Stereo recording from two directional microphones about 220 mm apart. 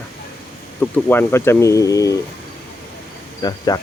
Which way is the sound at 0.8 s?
5° left (ahead or behind).